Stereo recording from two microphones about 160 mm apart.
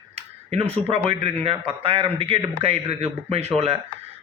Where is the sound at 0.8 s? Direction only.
35° right (ahead or behind).